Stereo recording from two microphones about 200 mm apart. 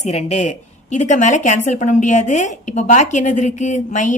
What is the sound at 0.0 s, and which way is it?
A woman's voice, 35° left (ahead or behind).